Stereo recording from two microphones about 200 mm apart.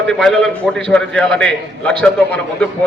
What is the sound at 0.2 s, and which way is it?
A man's voice, centre (ahead or behind).